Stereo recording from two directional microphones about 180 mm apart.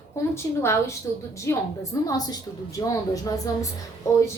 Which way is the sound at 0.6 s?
15° left (ahead or behind).